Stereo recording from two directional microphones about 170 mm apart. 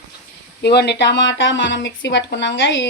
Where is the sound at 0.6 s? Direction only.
75° left (ahead or behind).